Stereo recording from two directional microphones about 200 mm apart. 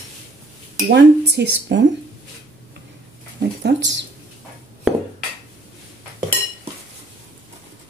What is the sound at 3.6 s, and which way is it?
Speech, 60° right (ahead or behind).